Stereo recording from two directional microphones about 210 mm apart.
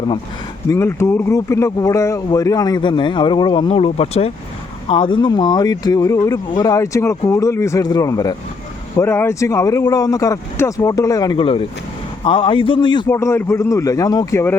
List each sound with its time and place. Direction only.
0.7 s speech: 15° left (ahead or behind)